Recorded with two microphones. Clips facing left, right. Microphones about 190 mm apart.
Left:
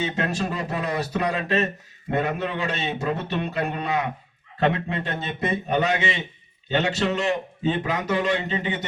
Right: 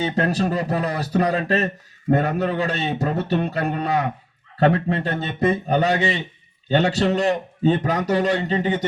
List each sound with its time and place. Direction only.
0.0 s speech: 35° right (ahead or behind)